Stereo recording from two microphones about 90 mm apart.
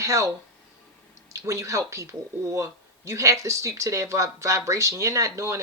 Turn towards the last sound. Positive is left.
turn(degrees=-35)  # may be behind; listen again after turning